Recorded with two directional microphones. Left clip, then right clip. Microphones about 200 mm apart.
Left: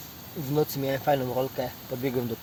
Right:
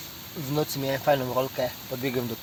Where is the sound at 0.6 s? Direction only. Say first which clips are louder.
Left 1 dB; 5° left (ahead or behind).